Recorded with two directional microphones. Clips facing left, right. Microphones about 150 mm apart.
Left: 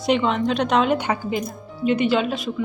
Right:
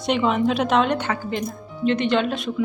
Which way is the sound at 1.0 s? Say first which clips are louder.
Left 1 dB; 10° left (ahead or behind).